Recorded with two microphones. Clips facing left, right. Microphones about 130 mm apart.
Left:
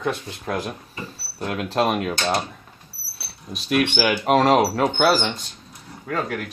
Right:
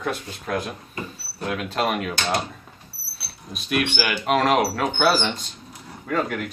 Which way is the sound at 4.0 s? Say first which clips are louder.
Left 4 dB; 35° left (ahead or behind).